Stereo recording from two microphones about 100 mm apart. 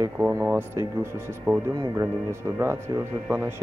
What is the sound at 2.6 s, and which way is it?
Speech, 25° right (ahead or behind).